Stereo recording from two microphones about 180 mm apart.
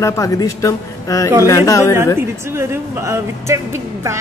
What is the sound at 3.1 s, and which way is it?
Speech, 15° right (ahead or behind).